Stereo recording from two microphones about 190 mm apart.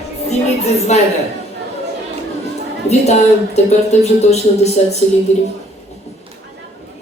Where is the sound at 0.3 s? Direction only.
35° left (ahead or behind).